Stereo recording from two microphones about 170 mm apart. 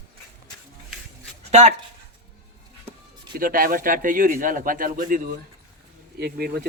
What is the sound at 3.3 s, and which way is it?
Speech, 55° right (ahead or behind).